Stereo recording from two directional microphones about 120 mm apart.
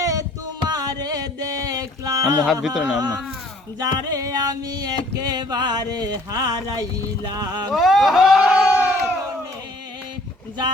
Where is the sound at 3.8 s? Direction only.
30° right (ahead or behind).